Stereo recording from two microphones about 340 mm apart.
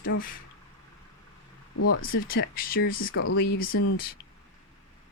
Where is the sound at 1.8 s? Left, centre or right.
Left.